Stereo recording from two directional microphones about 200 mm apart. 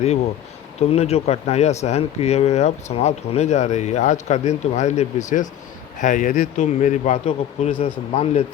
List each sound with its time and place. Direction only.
0.8 s speech: 30° left (ahead or behind)